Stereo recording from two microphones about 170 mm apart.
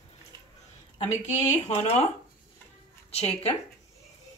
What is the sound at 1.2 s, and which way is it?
Speech, 40° left (ahead or behind).